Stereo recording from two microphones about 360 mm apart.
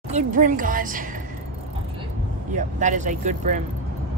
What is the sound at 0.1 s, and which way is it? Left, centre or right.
Speech, right.